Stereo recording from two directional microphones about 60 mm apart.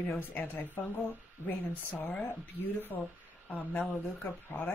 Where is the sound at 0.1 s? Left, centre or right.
Left.